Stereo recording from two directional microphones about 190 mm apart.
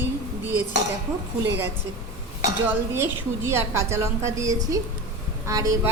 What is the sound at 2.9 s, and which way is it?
A woman's voice, 15° right (ahead or behind).